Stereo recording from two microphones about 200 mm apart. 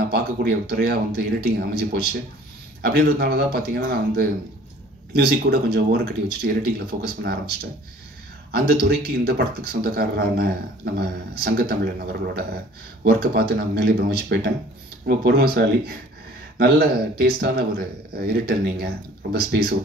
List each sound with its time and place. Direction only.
0.1 s speech: 50° right (ahead or behind)
2.8 s speech: 50° right (ahead or behind)
8.5 s speech: 55° right (ahead or behind)